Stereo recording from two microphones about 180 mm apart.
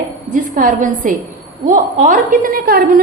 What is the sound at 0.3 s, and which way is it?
A woman's voice, 45° right (ahead or behind).